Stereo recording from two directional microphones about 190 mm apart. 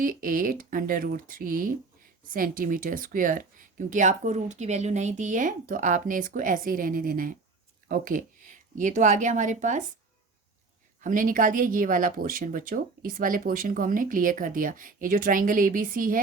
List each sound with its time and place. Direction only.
0.0 s speech: 45° right (ahead or behind)
11.0 s speech: 45° right (ahead or behind)